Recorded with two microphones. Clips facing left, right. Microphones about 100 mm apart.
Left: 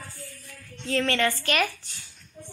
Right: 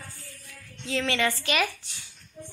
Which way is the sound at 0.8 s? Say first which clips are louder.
Left 2 dB; 10° right (ahead or behind).